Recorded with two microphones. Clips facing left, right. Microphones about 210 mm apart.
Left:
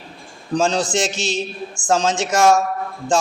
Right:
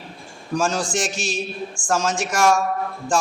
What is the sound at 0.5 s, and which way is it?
A man's voice, 20° left (ahead or behind).